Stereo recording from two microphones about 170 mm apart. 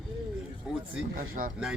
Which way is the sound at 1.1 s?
55° right (ahead or behind).